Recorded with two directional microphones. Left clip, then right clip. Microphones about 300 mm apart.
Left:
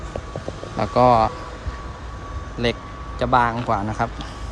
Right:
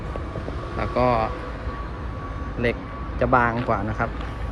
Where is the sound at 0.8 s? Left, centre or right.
Centre.